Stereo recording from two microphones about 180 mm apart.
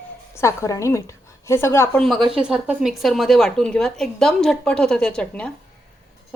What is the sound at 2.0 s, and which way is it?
A woman's voice, centre (ahead or behind).